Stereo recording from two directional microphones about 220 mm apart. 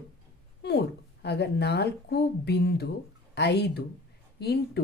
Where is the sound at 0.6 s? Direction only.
50° left (ahead or behind).